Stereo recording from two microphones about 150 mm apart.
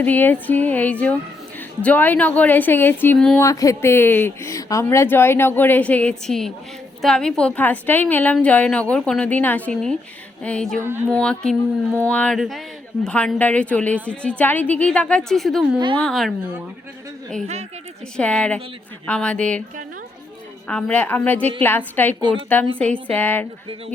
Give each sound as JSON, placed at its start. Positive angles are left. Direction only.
{"t": 0.0, "sound": "speech", "side_deg": 10}
{"t": 3.4, "sound": "speech", "side_deg": 20}
{"t": 10.8, "sound": "speech", "side_deg": -15}
{"t": 11.1, "sound": "speech", "side_deg": 5}
{"t": 18.2, "sound": "speech", "side_deg": 10}
{"t": 20.7, "sound": "speech", "side_deg": 10}
{"t": 22.2, "sound": "a woman's voice", "side_deg": -35}
{"t": 22.8, "sound": "speech", "side_deg": 10}